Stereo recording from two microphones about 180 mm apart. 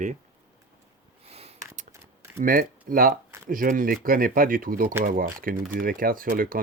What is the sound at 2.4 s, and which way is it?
Speech, 50° right (ahead or behind).